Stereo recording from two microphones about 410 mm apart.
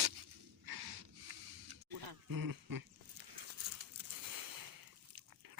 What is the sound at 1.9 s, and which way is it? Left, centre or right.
Dog, right.